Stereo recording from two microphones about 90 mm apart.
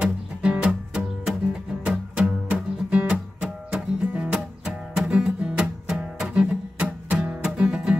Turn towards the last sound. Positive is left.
turn(degrees=-10)  # may be behind; listen again after turning